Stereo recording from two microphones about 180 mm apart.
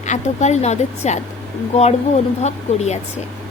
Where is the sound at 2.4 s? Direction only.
40° left (ahead or behind).